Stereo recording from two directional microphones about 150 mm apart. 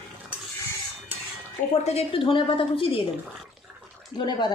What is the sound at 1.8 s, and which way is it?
A woman's voice, 45° left (ahead or behind).